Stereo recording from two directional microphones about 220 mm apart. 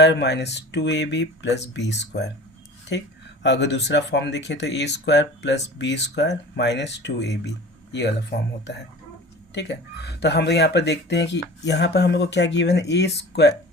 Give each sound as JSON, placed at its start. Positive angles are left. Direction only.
{"t": 0.0, "sound": "speech", "side_deg": 50}